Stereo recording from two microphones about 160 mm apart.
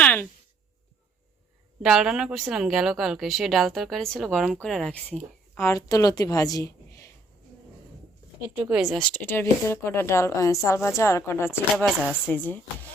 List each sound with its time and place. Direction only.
0.0 s a sound: 10° left (ahead or behind)
1.8 s speech: centre (ahead or behind); by 7.1 s 20° left (ahead or behind)
8.4 s speech: 5° right (ahead or behind); by 11.9 s 15° left (ahead or behind)
11.9 s speech: 5° right (ahead or behind)